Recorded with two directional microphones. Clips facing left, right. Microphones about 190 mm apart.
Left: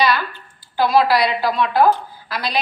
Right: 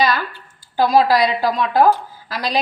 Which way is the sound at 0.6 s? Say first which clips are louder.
Right 1 dB; 40° right (ahead or behind).